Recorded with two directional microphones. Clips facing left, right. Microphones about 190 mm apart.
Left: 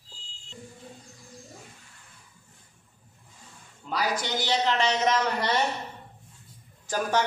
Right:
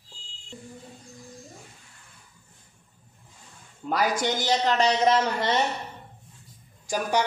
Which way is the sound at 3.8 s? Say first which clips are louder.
Right 4 dB; 50° right (ahead or behind).